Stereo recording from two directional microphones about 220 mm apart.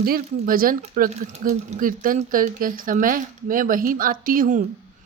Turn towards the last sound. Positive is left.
turn(degrees=-40)  # may be behind; listen again after turning